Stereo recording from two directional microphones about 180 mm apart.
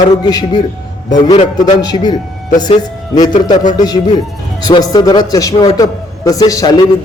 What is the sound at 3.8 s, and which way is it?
A man's voice, 20° left (ahead or behind).